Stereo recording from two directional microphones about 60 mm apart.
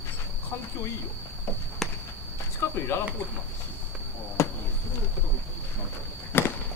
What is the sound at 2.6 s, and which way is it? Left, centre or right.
Speech, left.